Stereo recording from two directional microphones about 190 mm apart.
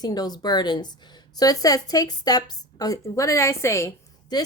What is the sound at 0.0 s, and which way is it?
A woman's voice, 20° left (ahead or behind).